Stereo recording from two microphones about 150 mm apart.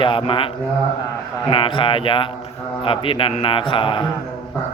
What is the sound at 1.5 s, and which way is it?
A man's voice, 35° left (ahead or behind).